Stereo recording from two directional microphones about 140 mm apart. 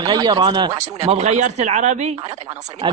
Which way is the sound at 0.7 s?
50° right (ahead or behind).